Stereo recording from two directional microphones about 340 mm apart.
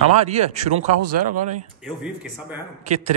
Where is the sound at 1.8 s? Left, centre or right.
Centre.